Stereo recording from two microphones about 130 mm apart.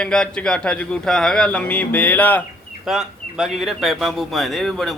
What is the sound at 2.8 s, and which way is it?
Speech, 5° right (ahead or behind).